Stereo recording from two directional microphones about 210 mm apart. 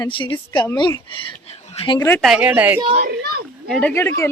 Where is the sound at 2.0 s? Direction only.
10° left (ahead or behind).